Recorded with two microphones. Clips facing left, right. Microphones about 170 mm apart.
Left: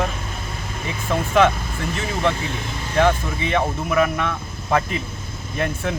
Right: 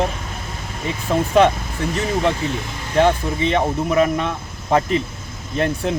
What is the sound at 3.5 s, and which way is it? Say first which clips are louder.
Speech: right 1 dB; 25° right (ahead or behind).